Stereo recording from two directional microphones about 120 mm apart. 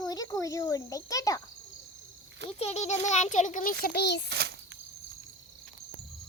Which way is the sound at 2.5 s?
60° left (ahead or behind).